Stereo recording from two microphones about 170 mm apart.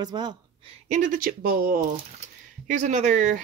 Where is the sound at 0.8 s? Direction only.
45° right (ahead or behind); by 1.7 s 60° right (ahead or behind).